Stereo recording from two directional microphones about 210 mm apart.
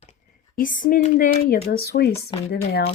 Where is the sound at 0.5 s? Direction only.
40° left (ahead or behind).